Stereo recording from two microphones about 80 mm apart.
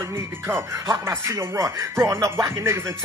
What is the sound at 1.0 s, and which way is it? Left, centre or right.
Speech, right.